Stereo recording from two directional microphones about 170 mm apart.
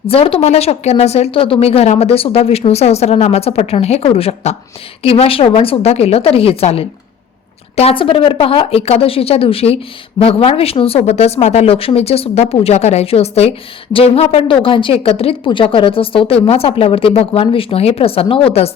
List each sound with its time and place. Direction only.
0.1 s a woman's voice: 35° left (ahead or behind)